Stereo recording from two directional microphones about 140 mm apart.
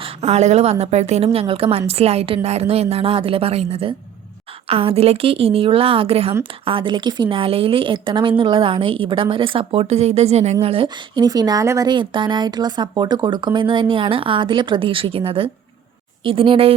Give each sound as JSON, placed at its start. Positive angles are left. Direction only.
{"t": 0.0, "sound": "a woman's voice", "side_deg": -50}
{"t": 10.8, "sound": "speech", "side_deg": -30}